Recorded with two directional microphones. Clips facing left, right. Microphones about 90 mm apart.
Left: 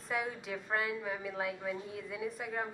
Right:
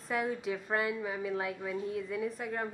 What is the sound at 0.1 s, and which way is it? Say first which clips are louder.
A woman's voice: right 4 dB; centre (ahead or behind).